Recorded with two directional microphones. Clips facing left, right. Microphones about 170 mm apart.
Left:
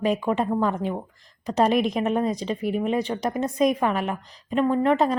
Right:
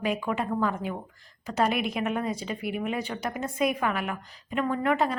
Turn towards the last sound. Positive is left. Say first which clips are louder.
# left 5 dB
turn(degrees=35)  # may be behind; listen again after turning